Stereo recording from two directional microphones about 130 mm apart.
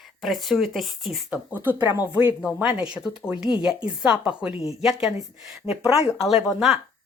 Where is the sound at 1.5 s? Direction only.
15° right (ahead or behind).